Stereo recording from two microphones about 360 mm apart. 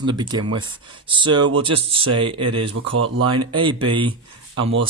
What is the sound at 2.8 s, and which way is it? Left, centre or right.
Speech, right.